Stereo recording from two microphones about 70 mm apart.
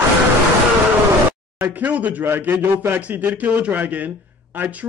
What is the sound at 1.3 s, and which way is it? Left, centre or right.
Speech, right.